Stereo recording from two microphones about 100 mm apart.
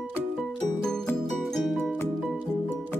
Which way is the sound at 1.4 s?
5° left (ahead or behind).